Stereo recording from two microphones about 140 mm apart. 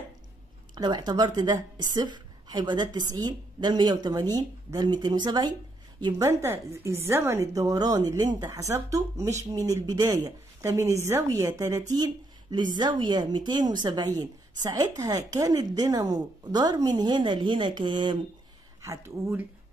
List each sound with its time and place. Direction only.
0.7 s a woman's voice: 30° right (ahead or behind)
6.4 s speech: 20° right (ahead or behind)
18.8 s speech: 20° right (ahead or behind)